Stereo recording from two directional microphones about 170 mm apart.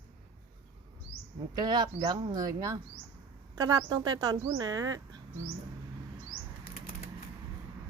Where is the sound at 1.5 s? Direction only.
25° right (ahead or behind).